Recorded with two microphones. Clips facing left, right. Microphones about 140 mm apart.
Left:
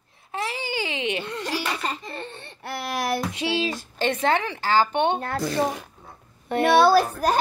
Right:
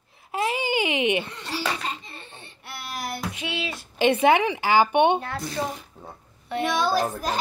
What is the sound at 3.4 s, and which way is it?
Music, 35° left (ahead or behind).